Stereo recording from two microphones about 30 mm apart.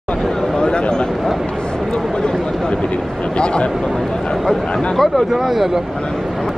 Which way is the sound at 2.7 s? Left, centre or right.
Left.